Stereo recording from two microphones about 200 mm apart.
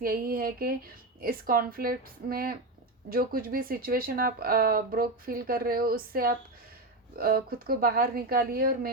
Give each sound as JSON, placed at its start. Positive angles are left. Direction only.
{"t": 0.0, "sound": "speech", "side_deg": -45}